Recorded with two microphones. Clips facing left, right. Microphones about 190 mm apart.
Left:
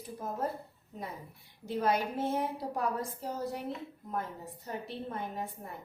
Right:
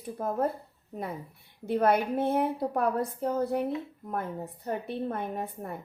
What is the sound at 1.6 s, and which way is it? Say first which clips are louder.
A woman's voice: right 6 dB; 60° right (ahead or behind).